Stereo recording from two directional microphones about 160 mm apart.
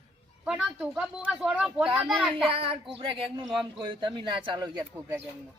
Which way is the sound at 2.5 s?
35° right (ahead or behind).